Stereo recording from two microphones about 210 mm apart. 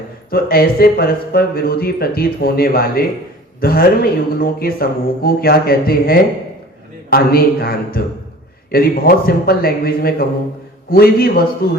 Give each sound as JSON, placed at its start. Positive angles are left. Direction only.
{"t": 0.3, "sound": "speech", "side_deg": 45}